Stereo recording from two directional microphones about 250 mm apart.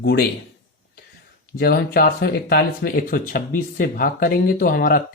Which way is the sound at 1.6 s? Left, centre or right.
Left.